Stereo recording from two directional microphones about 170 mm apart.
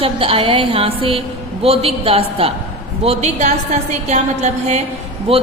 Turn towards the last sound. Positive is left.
turn(degrees=-35)  # may be behind; listen again after turning